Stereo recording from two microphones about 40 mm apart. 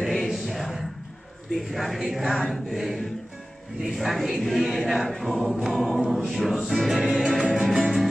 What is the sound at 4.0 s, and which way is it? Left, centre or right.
Choir, centre.